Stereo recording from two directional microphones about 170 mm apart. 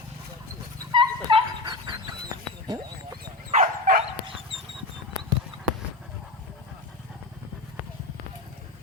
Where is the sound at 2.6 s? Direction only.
25° right (ahead or behind).